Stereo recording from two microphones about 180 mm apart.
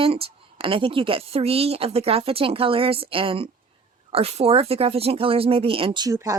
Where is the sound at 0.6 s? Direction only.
30° right (ahead or behind).